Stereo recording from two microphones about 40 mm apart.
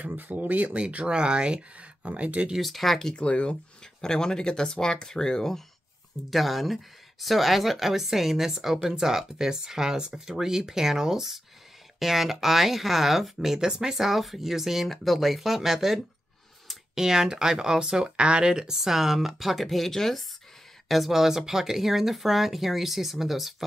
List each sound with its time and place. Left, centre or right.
0.0 s speech: right
0.7 s speech: right
2.6 s speech: centre
3.2 s speech: left
6.3 s speech: centre
18.8 s speech: centre
20.9 s speech: centre